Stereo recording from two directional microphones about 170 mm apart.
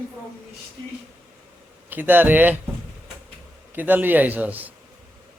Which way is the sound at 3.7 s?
10° right (ahead or behind).